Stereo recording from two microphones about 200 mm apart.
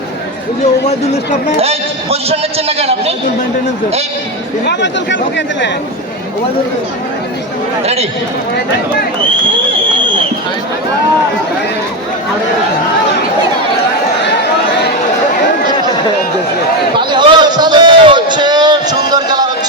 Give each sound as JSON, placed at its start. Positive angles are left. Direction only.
{"t": 0.6, "sound": "speech", "side_deg": 35}
{"t": 2.6, "sound": "a man's voice", "side_deg": -30}
{"t": 4.6, "sound": "speech", "side_deg": 60}
{"t": 17.1, "sound": "a sound", "side_deg": -25}